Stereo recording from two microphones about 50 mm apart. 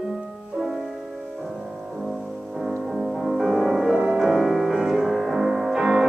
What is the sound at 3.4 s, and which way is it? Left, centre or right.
Music, centre.